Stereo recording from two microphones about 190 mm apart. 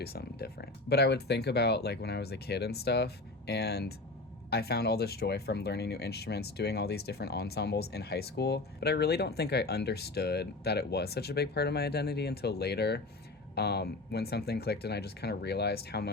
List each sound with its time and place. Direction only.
0.0 s speech: 55° left (ahead or behind)